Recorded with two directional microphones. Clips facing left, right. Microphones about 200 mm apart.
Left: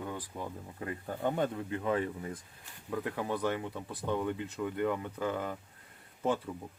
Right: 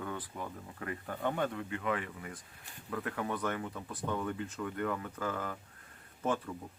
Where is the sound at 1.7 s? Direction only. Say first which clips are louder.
Left 4 dB; 30° left (ahead or behind).